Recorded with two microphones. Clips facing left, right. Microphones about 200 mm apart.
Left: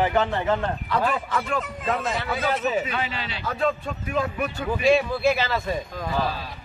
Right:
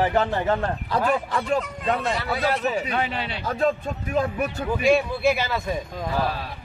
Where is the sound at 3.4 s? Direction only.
40° right (ahead or behind).